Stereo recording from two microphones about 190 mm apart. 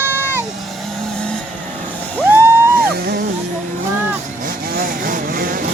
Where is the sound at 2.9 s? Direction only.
55° right (ahead or behind).